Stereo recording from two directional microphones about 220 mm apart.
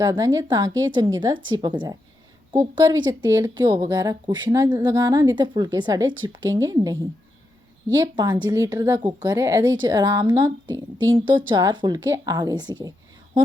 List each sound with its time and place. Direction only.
0.0 s speech: 15° right (ahead or behind)